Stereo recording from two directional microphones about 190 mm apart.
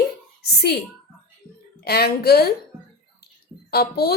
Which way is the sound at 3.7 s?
55° left (ahead or behind).